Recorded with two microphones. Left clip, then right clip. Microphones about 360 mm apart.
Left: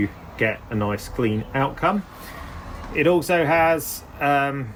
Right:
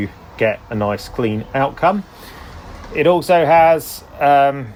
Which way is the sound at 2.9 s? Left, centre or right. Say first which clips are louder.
Right 6 dB; right.